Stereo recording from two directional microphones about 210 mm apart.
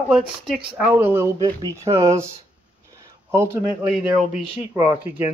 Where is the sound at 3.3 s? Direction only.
10° right (ahead or behind).